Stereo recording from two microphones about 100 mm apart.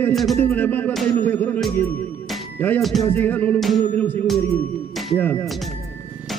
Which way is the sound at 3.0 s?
20° left (ahead or behind).